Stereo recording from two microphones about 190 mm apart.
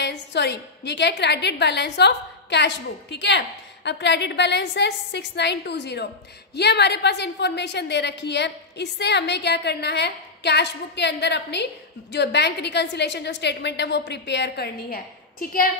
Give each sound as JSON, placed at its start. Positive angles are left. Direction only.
{"t": 0.0, "sound": "a woman's voice", "side_deg": 65}